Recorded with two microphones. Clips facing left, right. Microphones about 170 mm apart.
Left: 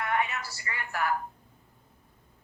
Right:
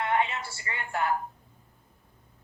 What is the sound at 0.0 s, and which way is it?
A woman's voice, 25° right (ahead or behind).